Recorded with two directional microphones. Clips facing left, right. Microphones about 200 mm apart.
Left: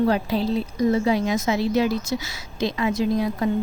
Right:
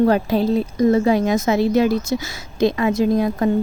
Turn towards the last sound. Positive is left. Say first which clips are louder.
# right 5 dB
turn(degrees=-50)  # may be behind; listen again after turning